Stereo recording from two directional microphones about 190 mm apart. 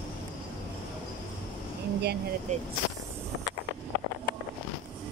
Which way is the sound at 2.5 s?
35° right (ahead or behind).